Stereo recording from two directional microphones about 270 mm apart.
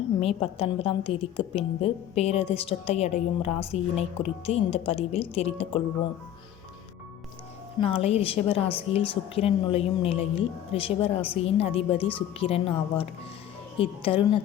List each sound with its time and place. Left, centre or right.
0.2 s a woman's voice: left
7.8 s a woman's voice: left